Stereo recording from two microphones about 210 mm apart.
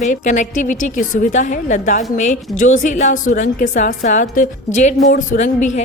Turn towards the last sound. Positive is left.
turn(degrees=40)  # may be behind; listen again after turning